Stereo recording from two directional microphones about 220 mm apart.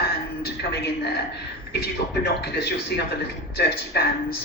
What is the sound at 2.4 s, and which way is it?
A man's voice, 50° left (ahead or behind).